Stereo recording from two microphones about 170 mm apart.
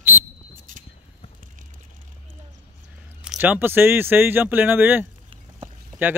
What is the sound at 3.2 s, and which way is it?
Speech, 10° right (ahead or behind).